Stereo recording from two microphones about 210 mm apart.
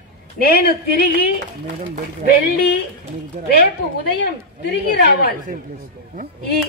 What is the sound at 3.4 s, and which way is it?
Speech, 40° right (ahead or behind).